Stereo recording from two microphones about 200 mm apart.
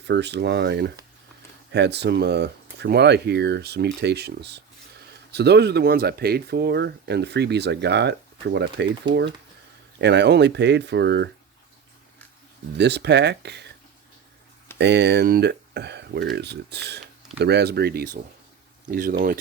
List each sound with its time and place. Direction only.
0.0 s speech: 60° right (ahead or behind)
10.0 s speech: 60° right (ahead or behind)
12.7 s speech: 60° right (ahead or behind)
14.8 s speech: 60° right (ahead or behind)